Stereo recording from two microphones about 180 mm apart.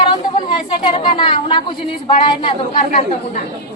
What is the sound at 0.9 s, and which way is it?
A woman's voice, 25° left (ahead or behind).